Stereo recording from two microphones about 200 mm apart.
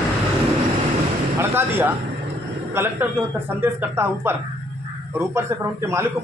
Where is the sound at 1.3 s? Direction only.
10° right (ahead or behind).